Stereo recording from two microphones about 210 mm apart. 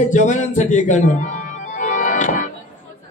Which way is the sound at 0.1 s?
35° left (ahead or behind).